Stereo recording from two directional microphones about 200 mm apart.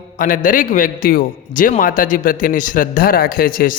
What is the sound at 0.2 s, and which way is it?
A man's voice, 45° left (ahead or behind).